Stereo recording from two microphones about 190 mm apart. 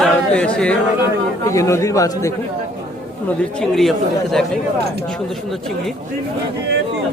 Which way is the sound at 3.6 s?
Centre (ahead or behind).